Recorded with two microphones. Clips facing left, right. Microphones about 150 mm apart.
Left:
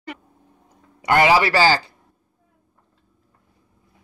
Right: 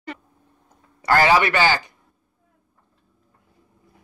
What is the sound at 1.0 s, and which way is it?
Speech, 20° left (ahead or behind).